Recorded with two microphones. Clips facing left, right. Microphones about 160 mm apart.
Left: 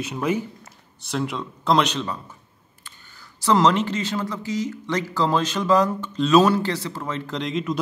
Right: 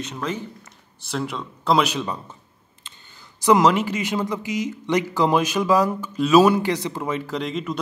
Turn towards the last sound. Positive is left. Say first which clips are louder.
# left 1 dB
turn(degrees=0)  # may be behind; listen again after turning